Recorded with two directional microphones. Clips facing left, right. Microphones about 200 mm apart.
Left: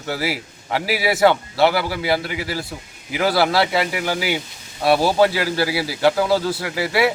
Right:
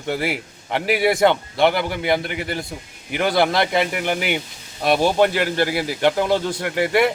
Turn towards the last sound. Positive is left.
turn(degrees=5)  # may be behind; listen again after turning